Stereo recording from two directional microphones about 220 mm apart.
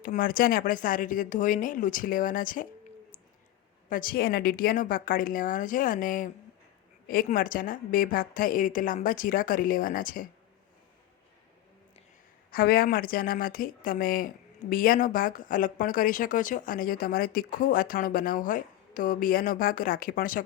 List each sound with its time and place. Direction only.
0.0 s speech: 40° left (ahead or behind)
3.8 s speech: 40° left (ahead or behind)
12.5 s speech: 40° left (ahead or behind)